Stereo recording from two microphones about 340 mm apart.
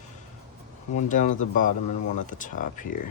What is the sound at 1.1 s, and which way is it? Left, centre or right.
Speech, left.